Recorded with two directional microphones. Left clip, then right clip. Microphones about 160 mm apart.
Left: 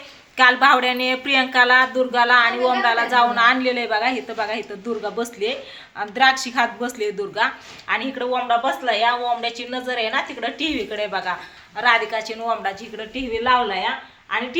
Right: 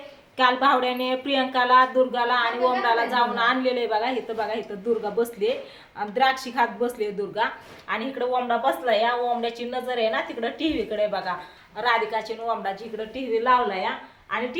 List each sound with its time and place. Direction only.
0.3 s speech: 15° left (ahead or behind)
7.9 s a woman's voice: 30° left (ahead or behind)
13.4 s a woman's voice: 50° left (ahead or behind)